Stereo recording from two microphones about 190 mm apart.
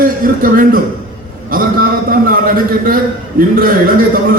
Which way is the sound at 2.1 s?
50° right (ahead or behind).